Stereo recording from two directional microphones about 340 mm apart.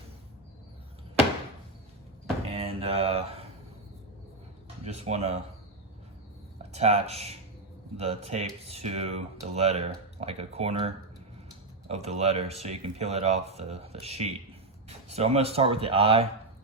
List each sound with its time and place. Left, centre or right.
2.5 s mantra: centre
4.9 s speech: centre
6.6 s speech: centre